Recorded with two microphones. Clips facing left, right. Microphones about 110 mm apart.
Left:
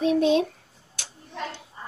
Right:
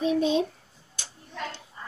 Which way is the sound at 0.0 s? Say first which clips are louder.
Left 3 dB; 5° left (ahead or behind).